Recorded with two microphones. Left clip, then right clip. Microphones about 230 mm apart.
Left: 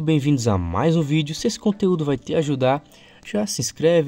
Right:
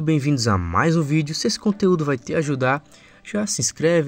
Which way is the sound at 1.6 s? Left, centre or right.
Centre.